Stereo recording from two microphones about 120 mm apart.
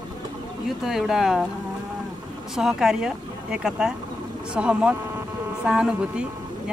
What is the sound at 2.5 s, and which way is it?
Speech, 5° right (ahead or behind).